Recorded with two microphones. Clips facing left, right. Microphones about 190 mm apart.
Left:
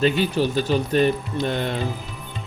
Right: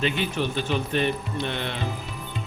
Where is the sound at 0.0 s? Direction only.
35° left (ahead or behind).